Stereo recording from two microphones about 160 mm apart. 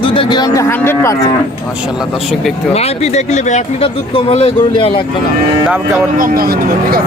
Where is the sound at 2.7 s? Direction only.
40° left (ahead or behind).